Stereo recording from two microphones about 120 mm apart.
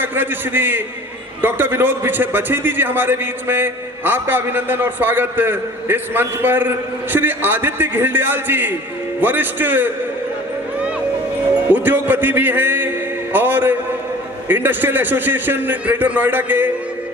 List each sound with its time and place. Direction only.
0.0 s a man's voice: 15° right (ahead or behind)
11.7 s a man's voice: 15° right (ahead or behind)